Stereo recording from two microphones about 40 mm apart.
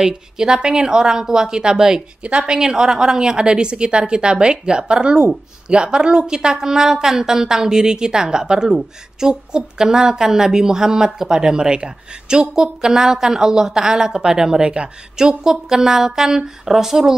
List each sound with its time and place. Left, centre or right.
0.0 s a woman's voice: centre